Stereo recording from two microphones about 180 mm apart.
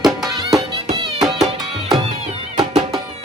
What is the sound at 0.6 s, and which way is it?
Music, 30° right (ahead or behind).